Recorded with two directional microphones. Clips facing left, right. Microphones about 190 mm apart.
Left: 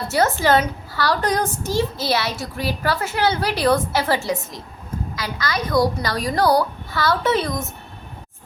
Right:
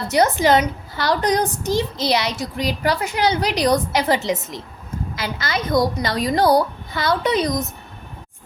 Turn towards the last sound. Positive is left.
turn(degrees=-15)  # may be behind; listen again after turning